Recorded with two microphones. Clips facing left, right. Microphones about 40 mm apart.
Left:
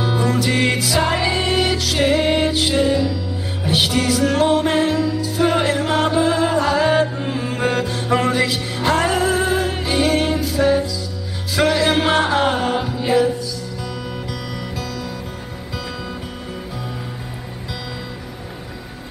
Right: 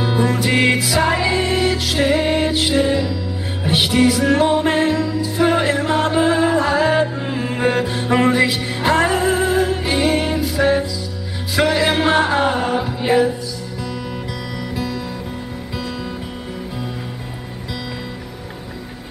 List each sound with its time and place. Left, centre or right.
0.0 s music: centre
6.8 s music: centre
9.8 s music: centre
10.6 s music: centre
11.5 s music: centre
12.9 s music: right